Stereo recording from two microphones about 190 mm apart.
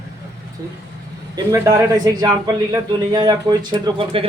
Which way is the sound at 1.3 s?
15° right (ahead or behind).